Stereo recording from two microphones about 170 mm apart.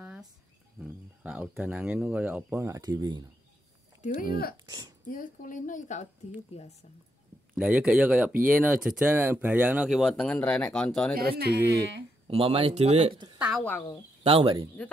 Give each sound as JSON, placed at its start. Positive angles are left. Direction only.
{"t": 0.0, "sound": "cricket", "side_deg": -5}
{"t": 0.7, "sound": "speech", "side_deg": -5}
{"t": 4.0, "sound": "speech", "side_deg": 50}
{"t": 4.6, "sound": "speech", "side_deg": -25}
{"t": 5.1, "sound": "speech", "side_deg": 55}
{"t": 7.5, "sound": "speech", "side_deg": -5}
{"t": 11.1, "sound": "speech", "side_deg": -65}
{"t": 12.3, "sound": "speech", "side_deg": -35}
{"t": 13.4, "sound": "speech", "side_deg": 0}
{"t": 13.7, "sound": "speech", "side_deg": 10}
{"t": 14.2, "sound": "speech", "side_deg": -35}